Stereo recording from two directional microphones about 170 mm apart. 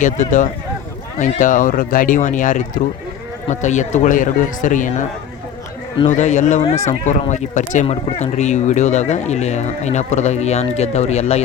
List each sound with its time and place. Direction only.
0.0 s speech: 45° left (ahead or behind)
6.1 s speech: 45° left (ahead or behind)